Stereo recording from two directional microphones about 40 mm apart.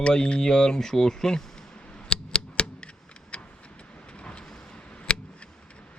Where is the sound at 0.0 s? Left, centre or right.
Left.